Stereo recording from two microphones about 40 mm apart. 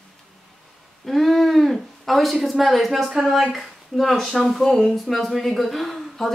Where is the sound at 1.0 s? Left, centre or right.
Centre.